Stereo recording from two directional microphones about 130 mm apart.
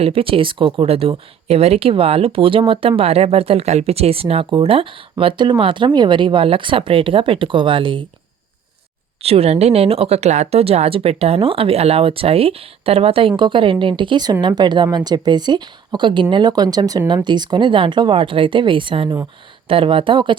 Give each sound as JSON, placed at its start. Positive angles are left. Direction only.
{"t": 0.0, "sound": "speech", "side_deg": -45}
{"t": 9.2, "sound": "speech", "side_deg": -50}